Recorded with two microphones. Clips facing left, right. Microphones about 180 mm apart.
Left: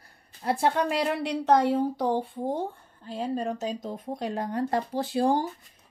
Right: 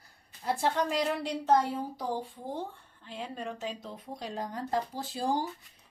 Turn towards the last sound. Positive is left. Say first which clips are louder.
# left 7 dB
turn(degrees=60)  # may be behind; listen again after turning